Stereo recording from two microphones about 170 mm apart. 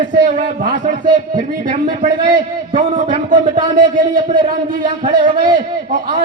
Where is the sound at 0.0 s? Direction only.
50° right (ahead or behind).